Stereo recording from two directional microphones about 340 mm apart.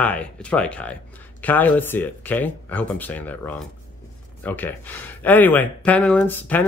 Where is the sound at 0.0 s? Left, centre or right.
Centre.